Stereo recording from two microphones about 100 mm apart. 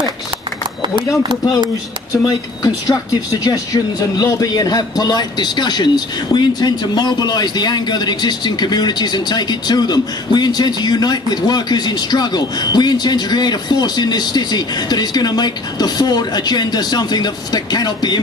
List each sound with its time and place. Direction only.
0.8 s speech: 50° right (ahead or behind)
2.2 s speech: 35° left (ahead or behind)